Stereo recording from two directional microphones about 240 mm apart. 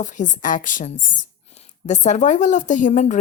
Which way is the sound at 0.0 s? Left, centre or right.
Left.